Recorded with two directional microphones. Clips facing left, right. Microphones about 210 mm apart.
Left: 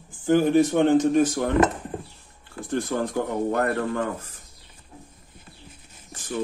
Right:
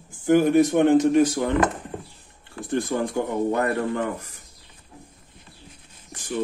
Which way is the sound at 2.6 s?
15° right (ahead or behind).